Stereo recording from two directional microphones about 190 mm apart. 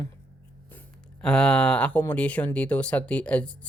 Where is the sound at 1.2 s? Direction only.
5° left (ahead or behind).